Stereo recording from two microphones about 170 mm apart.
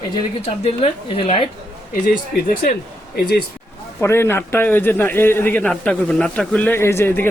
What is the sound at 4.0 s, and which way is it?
A man's voice, 15° left (ahead or behind).